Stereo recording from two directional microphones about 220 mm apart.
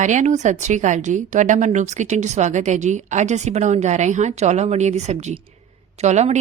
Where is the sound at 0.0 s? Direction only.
35° right (ahead or behind).